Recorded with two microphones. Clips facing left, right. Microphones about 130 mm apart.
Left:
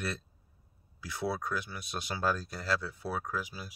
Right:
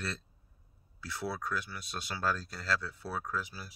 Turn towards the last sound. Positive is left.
turn(degrees=15)  # may be behind; listen again after turning